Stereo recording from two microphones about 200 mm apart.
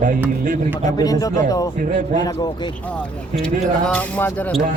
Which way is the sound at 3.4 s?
5° left (ahead or behind).